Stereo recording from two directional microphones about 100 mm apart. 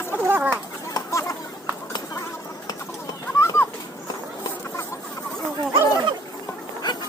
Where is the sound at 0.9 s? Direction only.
30° left (ahead or behind).